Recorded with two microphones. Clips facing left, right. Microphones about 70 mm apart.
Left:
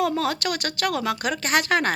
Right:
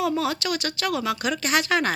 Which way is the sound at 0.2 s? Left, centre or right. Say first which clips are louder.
Even; left.